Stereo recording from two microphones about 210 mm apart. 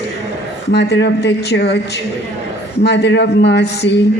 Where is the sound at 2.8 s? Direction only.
55° left (ahead or behind).